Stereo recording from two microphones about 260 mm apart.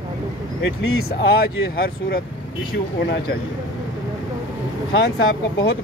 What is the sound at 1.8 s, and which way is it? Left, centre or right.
Speech, left.